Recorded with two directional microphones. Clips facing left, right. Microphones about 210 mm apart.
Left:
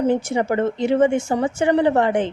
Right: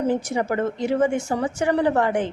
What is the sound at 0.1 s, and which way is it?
A woman's voice, 25° left (ahead or behind).